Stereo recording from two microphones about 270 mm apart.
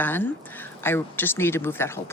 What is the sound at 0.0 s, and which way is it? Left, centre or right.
Speech, centre.